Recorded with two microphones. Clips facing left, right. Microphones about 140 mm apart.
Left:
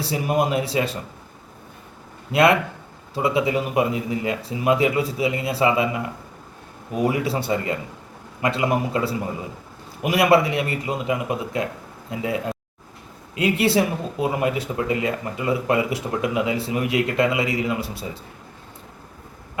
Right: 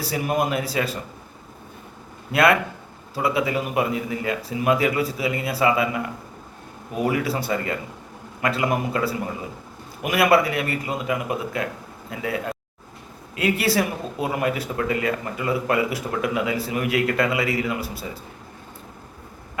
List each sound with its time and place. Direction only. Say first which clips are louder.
0.5 s speech: left 2 dB; 25° left (ahead or behind)
2.3 s speech: left 1 dB; 25° left (ahead or behind)
7.0 s speech: left 1 dB; 25° left (ahead or behind)